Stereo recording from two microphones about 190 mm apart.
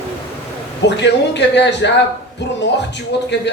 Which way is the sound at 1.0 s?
65° left (ahead or behind).